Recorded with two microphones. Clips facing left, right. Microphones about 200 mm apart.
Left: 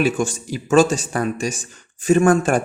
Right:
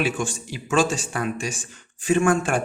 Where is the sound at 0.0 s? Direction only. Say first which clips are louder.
Left 5 dB; 40° left (ahead or behind).